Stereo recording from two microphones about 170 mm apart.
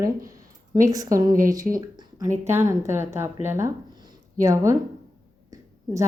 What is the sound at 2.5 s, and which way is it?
A woman's voice, 15° right (ahead or behind).